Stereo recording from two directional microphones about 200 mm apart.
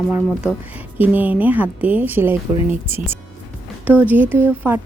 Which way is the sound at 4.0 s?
10° right (ahead or behind).